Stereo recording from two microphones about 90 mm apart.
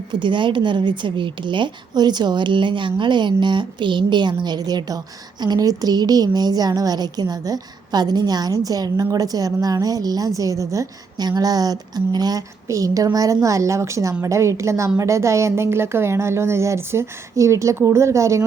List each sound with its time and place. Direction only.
0.1 s a woman's voice: 60° right (ahead or behind); by 18.4 s 35° right (ahead or behind)